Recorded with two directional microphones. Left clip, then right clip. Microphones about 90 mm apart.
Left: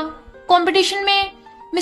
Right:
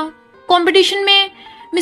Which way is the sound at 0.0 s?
35° right (ahead or behind).